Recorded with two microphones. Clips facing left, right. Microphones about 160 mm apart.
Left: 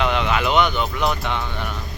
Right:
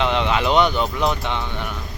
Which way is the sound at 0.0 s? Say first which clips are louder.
Right 1 dB; 25° right (ahead or behind).